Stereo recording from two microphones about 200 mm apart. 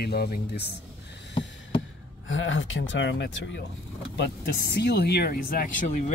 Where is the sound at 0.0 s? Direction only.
50° left (ahead or behind).